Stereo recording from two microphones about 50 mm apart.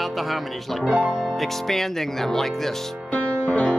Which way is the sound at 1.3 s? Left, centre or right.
Centre.